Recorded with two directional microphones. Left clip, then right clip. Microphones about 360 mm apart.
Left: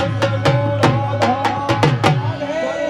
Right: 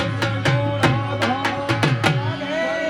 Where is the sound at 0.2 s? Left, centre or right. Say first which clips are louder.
Left 5 dB; left.